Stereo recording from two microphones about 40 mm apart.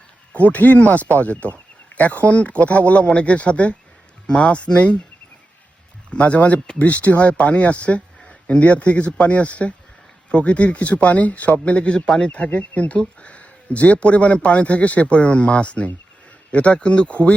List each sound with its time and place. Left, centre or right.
0.4 s a man's voice: left
6.1 s a man's voice: left
12.5 s a man's voice: left
13.2 s a sound: left
13.7 s a man's voice: left